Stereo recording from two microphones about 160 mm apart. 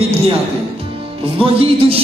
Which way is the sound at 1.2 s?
35° right (ahead or behind).